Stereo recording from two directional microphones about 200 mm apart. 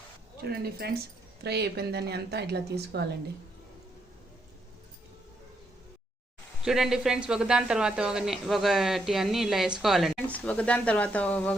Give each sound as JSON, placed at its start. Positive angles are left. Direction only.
{"t": 0.4, "sound": "speech", "side_deg": -50}
{"t": 6.7, "sound": "speech", "side_deg": 0}